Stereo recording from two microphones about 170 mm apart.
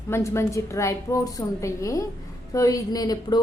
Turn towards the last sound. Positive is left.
turn(degrees=20)  # may be behind; listen again after turning